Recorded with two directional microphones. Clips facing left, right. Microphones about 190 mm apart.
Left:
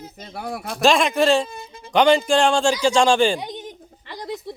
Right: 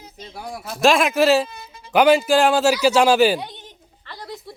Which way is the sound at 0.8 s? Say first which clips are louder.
Right 1 dB; centre (ahead or behind).